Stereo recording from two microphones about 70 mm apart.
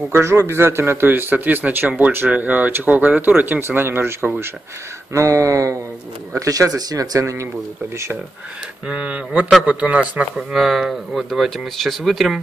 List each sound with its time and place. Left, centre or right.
0.1 s a man's voice: right
5.1 s speech: right
8.8 s a man's voice: centre
10.5 s speech: centre